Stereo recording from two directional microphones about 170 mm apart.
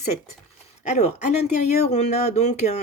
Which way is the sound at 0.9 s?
45° left (ahead or behind).